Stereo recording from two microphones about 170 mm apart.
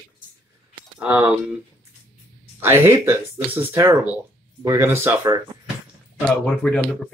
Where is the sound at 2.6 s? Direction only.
15° right (ahead or behind).